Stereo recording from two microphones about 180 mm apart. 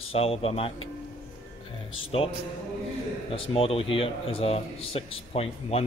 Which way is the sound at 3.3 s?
30° left (ahead or behind).